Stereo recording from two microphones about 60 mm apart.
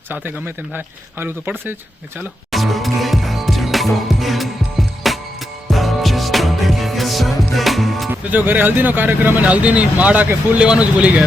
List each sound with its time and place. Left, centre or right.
0.1 s speech: right
2.5 s music: centre
8.1 s speech: right